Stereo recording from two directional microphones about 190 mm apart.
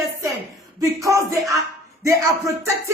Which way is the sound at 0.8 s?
15° right (ahead or behind).